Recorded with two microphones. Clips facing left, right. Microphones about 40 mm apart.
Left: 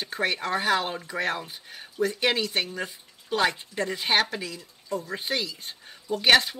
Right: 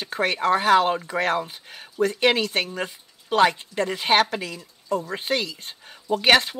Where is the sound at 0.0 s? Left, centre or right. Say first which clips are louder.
Right 5 dB; right.